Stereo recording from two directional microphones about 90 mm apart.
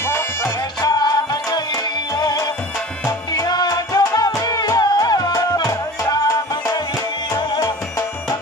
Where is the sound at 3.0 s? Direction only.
40° left (ahead or behind).